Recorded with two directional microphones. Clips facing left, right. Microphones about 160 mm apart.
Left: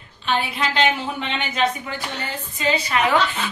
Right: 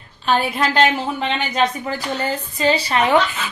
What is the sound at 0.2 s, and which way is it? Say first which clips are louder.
A woman's voice: right 4 dB; 40° right (ahead or behind).